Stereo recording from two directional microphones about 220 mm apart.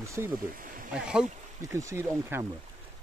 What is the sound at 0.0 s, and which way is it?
Speech, 15° right (ahead or behind).